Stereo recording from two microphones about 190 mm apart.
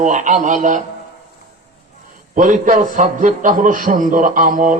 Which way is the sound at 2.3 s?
45° right (ahead or behind).